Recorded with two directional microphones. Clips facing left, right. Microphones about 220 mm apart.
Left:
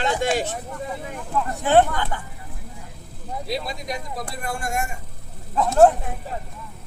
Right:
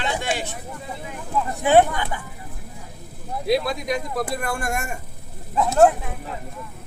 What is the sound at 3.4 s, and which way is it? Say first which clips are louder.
Speech: right 8 dB; 60° right (ahead or behind).